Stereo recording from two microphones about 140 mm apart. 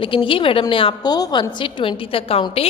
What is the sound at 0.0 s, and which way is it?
A woman's voice, 35° left (ahead or behind).